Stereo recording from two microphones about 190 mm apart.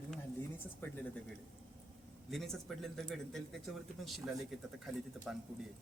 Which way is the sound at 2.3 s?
Centre (ahead or behind).